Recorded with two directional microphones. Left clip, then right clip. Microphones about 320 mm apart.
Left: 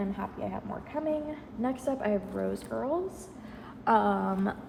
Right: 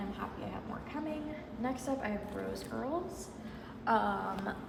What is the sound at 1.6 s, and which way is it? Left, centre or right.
Speech, centre.